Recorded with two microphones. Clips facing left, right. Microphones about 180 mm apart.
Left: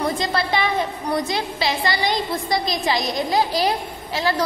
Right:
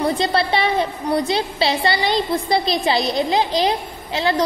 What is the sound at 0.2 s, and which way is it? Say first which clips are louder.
A woman's voice: right 3 dB; 30° right (ahead or behind).